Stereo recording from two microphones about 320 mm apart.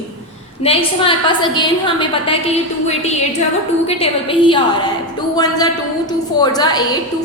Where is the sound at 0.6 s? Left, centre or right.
Centre.